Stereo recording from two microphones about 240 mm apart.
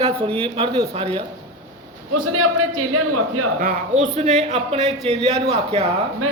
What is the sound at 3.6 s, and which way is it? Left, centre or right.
Speech, right.